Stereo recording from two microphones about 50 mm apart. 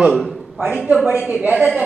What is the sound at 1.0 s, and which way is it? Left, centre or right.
Speech, right.